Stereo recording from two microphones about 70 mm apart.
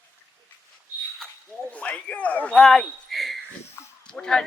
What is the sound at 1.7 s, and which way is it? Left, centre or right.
Speech, left.